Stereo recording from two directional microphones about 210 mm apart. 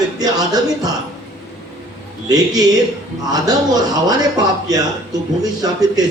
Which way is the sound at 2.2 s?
20° right (ahead or behind).